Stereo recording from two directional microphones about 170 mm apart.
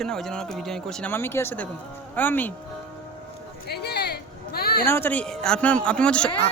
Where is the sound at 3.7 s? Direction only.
70° left (ahead or behind).